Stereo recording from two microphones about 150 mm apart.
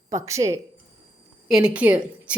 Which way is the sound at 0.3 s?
20° right (ahead or behind).